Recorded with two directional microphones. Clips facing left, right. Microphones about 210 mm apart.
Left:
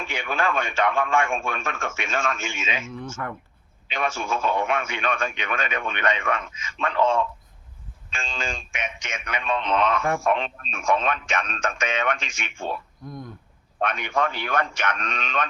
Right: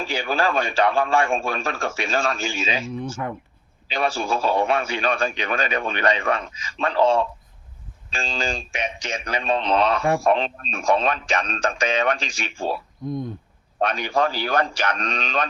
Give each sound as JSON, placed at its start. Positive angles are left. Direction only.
{"t": 0.0, "sound": "a man's voice", "side_deg": -35}
{"t": 3.2, "sound": "speech", "side_deg": -20}
{"t": 3.8, "sound": "a man's voice", "side_deg": -35}
{"t": 13.1, "sound": "speech", "side_deg": -25}
{"t": 13.7, "sound": "a man's voice", "side_deg": -35}